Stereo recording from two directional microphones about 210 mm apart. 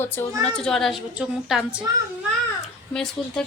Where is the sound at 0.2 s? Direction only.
10° left (ahead or behind).